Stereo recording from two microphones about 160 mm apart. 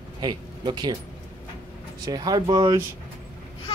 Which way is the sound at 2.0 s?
25° right (ahead or behind).